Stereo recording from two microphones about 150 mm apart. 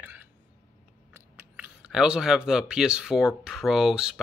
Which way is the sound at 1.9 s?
5° right (ahead or behind).